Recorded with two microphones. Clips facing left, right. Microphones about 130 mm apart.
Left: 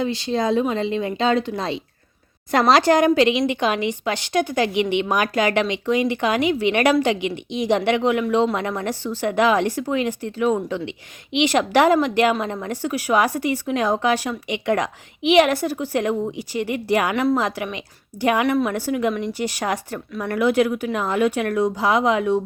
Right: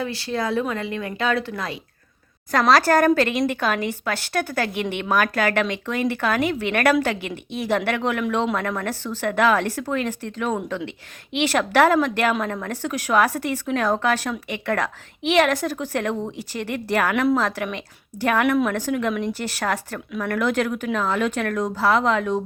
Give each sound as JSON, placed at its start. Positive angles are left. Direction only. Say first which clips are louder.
{"t": 0.0, "sound": "speech", "louder": "left 4 dB", "side_deg": 20}
{"t": 3.2, "sound": "a woman's voice", "louder": "left 3 dB", "side_deg": -50}
{"t": 3.5, "sound": "speech", "louder": "left 2 dB", "side_deg": 15}
{"t": 4.7, "sound": "a woman's voice", "louder": "left 6 dB", "side_deg": -50}
{"t": 5.0, "sound": "speech", "louder": "left 1 dB", "side_deg": 15}